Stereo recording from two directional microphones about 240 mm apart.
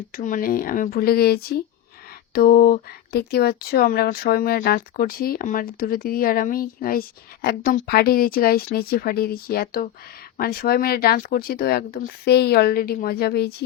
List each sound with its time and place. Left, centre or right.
0.2 s speech: left